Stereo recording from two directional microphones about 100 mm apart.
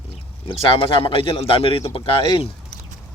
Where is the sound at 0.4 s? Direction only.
60° left (ahead or behind).